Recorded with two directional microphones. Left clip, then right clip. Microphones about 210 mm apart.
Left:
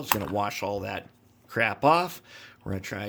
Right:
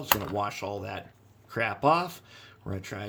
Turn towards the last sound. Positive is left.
turn(degrees=30)  # may be behind; listen again after turning